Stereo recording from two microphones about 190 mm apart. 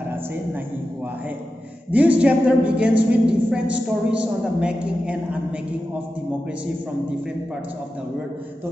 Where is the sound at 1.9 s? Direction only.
5° right (ahead or behind).